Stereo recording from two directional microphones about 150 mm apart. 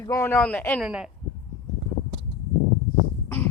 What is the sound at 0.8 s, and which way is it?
Speech, 5° right (ahead or behind).